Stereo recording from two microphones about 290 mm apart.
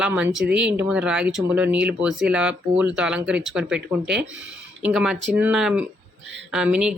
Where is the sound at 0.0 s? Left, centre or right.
Centre.